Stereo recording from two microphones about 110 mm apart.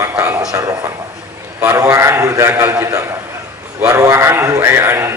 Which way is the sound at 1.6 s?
25° right (ahead or behind).